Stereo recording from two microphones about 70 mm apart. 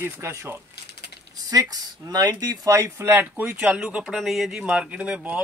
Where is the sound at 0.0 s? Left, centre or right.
Right.